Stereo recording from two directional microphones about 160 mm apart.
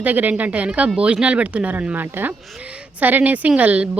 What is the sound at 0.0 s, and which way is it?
Speech, 10° right (ahead or behind).